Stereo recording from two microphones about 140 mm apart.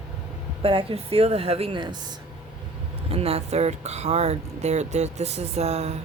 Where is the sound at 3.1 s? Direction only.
45° right (ahead or behind).